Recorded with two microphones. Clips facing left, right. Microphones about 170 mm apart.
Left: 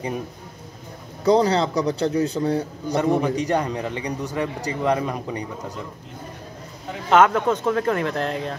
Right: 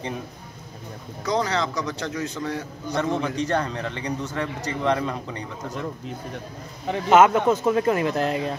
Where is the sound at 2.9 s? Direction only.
15° left (ahead or behind).